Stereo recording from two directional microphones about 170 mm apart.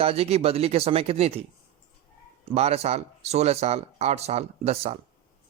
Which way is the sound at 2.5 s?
35° right (ahead or behind).